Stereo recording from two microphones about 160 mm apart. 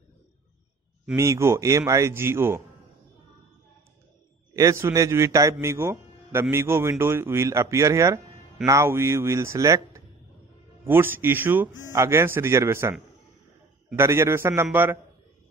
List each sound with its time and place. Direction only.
1.1 s a man's voice: 20° right (ahead or behind)
4.6 s a man's voice: 20° right (ahead or behind)